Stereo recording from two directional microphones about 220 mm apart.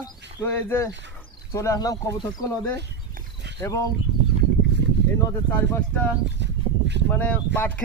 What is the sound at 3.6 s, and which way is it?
Speech, 15° left (ahead or behind).